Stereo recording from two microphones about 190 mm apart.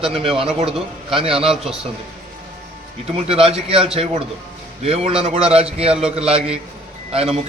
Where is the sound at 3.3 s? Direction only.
30° right (ahead or behind).